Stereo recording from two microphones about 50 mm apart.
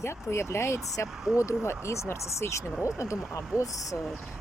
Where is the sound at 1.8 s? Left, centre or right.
Left.